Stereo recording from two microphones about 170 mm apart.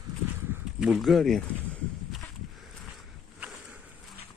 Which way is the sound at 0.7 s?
5° right (ahead or behind).